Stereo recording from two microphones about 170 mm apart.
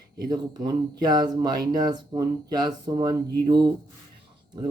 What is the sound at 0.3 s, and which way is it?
Speech, 25° right (ahead or behind).